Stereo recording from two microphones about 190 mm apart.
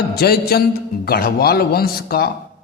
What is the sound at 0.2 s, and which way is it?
A man's voice, 55° left (ahead or behind).